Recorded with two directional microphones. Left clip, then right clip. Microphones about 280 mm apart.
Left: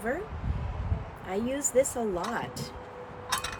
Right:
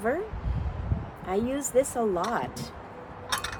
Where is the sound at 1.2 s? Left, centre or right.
Centre.